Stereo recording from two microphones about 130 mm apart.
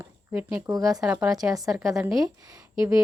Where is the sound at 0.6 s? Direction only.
30° right (ahead or behind).